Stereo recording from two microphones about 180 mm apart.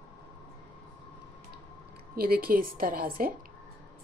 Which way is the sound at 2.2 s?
55° right (ahead or behind).